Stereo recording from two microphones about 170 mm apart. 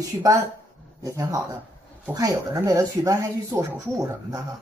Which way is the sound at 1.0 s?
20° right (ahead or behind).